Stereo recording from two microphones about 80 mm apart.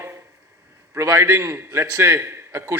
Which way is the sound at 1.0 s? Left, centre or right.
Right.